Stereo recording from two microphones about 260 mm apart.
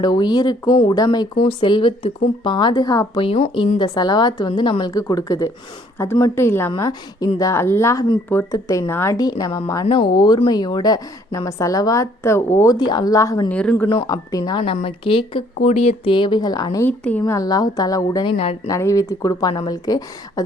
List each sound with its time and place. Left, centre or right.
0.0 s speech: centre